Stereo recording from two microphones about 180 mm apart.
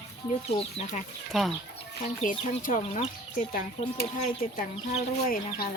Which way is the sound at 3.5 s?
50° left (ahead or behind).